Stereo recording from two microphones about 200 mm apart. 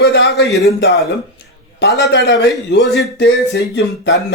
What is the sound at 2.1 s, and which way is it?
Speech, 60° left (ahead or behind).